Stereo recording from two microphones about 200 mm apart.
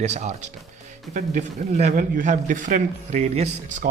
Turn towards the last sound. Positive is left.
turn(degrees=-40)  # may be behind; listen again after turning